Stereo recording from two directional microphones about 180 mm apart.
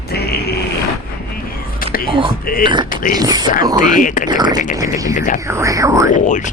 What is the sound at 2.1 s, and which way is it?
Speech, 30° right (ahead or behind).